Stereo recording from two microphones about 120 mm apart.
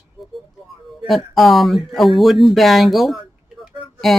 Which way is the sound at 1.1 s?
Centre (ahead or behind).